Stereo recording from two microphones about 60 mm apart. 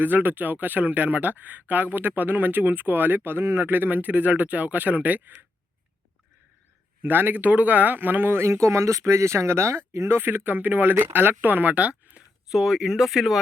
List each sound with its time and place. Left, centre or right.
0.0 s speech: right
7.0 s speech: right
8.6 s speech: right
12.5 s speech: centre